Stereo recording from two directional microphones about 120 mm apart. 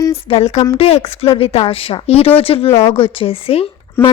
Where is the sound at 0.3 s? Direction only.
60° left (ahead or behind).